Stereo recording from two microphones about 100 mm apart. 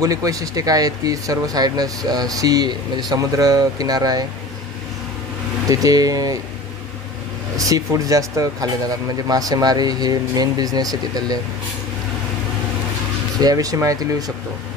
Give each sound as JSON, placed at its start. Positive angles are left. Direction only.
{"t": 0.0, "sound": "speech", "side_deg": -35}
{"t": 5.7, "sound": "speech", "side_deg": -35}
{"t": 7.5, "sound": "speech", "side_deg": -35}
{"t": 13.4, "sound": "speech", "side_deg": -40}